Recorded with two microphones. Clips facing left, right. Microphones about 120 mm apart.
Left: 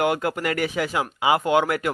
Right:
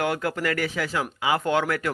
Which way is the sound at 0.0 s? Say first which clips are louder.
Left 3 dB; 20° left (ahead or behind).